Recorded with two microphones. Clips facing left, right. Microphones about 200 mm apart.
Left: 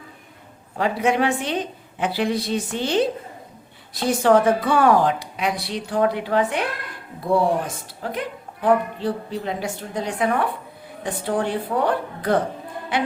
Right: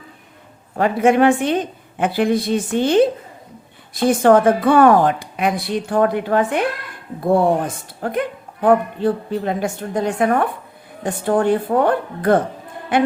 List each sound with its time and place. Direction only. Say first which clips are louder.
0.8 s a woman's voice: right 6 dB; 50° right (ahead or behind)